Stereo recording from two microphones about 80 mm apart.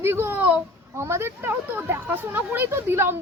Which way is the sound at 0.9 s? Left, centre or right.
Right.